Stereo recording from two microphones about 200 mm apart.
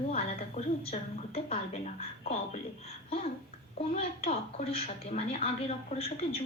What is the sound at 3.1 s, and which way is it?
A child's voice, 30° left (ahead or behind).